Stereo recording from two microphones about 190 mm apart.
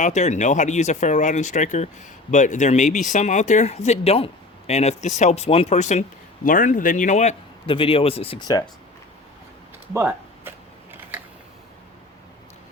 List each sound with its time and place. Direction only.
0.0 s speech: 40° left (ahead or behind); by 8.6 s 20° left (ahead or behind)
9.9 s speech: 10° right (ahead or behind)